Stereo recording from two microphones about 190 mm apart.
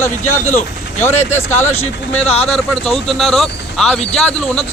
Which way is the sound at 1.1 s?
35° left (ahead or behind).